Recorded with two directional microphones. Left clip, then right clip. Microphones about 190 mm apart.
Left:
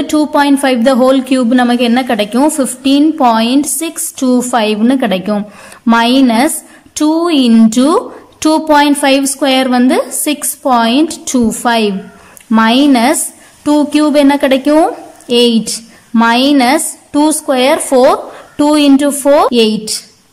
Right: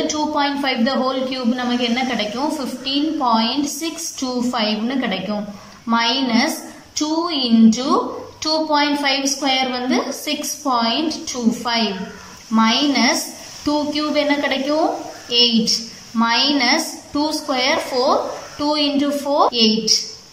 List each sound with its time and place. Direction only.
0.1 s a woman's voice: 45° left (ahead or behind)